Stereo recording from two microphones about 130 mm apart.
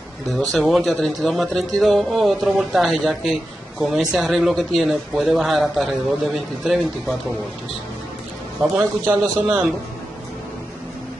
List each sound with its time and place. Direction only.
0.3 s a man's voice: centre (ahead or behind)
8.7 s speech: 20° right (ahead or behind)